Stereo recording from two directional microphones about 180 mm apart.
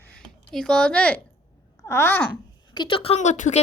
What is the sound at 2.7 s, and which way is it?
Speech, 25° left (ahead or behind).